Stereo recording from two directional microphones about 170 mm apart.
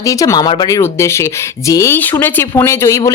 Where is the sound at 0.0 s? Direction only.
20° left (ahead or behind).